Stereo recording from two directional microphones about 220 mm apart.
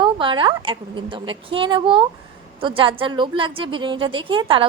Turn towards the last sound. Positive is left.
turn(degrees=-25)  # may be behind; listen again after turning